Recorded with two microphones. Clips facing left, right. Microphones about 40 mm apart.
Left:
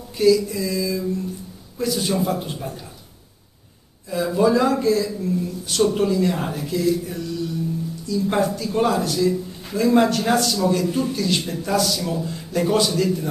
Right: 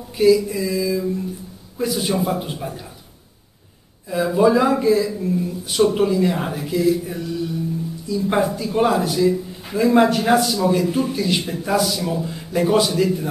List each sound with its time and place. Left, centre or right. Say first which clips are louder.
0.2 s a man's voice: right 2 dB; centre
4.1 s a man's voice: right 2 dB; centre